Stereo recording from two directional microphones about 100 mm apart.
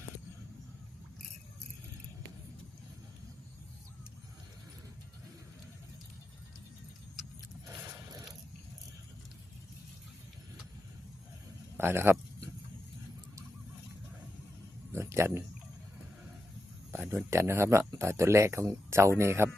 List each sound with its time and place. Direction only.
11.8 s speech: 25° right (ahead or behind)
14.9 s a sound: 25° right (ahead or behind)
16.9 s speech: 20° right (ahead or behind)